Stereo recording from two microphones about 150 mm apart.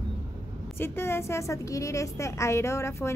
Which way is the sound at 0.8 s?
15° left (ahead or behind).